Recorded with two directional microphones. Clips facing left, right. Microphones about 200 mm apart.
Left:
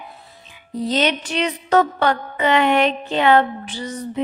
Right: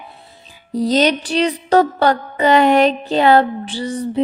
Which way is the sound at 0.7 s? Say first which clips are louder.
Right 5 dB; 35° right (ahead or behind).